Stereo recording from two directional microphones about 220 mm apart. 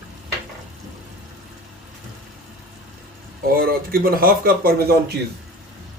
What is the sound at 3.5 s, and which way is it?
Speech, 40° right (ahead or behind).